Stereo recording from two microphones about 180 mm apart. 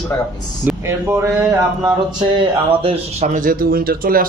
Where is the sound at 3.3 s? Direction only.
50° right (ahead or behind).